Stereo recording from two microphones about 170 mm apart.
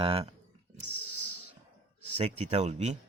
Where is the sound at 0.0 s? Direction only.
30° right (ahead or behind).